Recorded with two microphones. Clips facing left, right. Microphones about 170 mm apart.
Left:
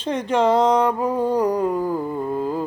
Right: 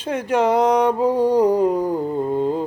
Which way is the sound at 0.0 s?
10° right (ahead or behind).